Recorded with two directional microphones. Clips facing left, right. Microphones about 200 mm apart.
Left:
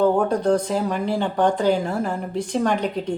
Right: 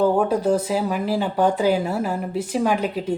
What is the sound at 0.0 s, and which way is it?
Speech, 5° right (ahead or behind).